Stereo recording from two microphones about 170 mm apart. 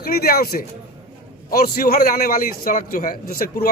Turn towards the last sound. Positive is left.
turn(degrees=60)  # may be behind; listen again after turning